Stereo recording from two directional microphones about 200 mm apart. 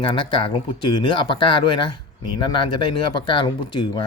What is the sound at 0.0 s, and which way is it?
Speech, 25° left (ahead or behind).